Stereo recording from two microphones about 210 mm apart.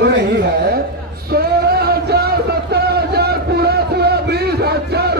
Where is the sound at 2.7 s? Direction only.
50° right (ahead or behind).